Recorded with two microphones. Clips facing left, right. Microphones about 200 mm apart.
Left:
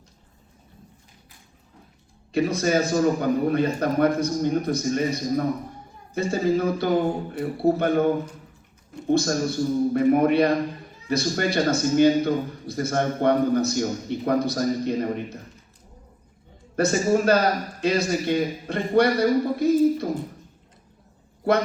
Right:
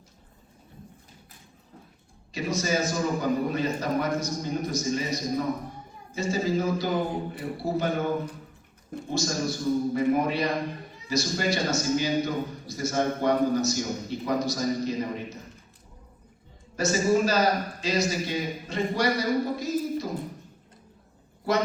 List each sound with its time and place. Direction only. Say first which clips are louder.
2.3 s a man's voice: left 6 dB; 60° left (ahead or behind)
9.0 s a man's voice: left 7 dB; 60° left (ahead or behind)
16.7 s a man's voice: left 3 dB; 55° left (ahead or behind)